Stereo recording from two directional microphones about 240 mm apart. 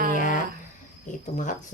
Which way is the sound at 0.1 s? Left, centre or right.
Left.